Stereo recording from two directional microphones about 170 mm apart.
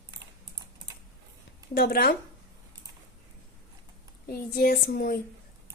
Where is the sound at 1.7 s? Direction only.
65° left (ahead or behind).